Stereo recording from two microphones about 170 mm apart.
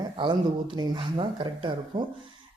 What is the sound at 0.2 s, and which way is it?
Speech, 30° right (ahead or behind).